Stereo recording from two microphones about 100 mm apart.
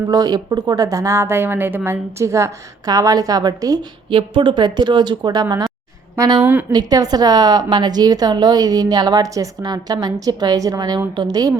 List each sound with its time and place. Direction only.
0.1 s a woman's voice: 40° right (ahead or behind)
4.1 s a woman's voice: 50° right (ahead or behind)
6.4 s a woman's voice: 15° right (ahead or behind)
6.7 s a woman's voice: 40° right (ahead or behind)